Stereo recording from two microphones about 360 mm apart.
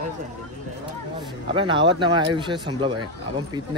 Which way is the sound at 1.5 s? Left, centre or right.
Centre.